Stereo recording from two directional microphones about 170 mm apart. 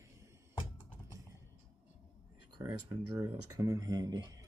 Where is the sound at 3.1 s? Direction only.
20° right (ahead or behind).